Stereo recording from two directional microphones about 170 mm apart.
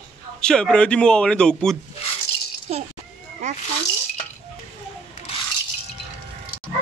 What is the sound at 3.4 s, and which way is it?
Cat, 40° right (ahead or behind).